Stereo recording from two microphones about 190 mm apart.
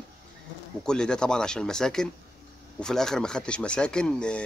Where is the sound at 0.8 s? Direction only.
5° left (ahead or behind).